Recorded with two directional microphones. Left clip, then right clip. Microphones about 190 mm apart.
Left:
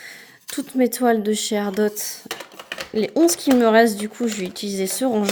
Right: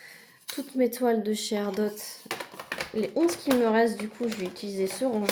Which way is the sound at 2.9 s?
50° left (ahead or behind).